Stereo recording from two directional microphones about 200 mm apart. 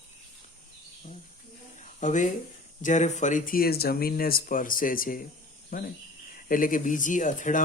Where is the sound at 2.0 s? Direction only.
35° left (ahead or behind).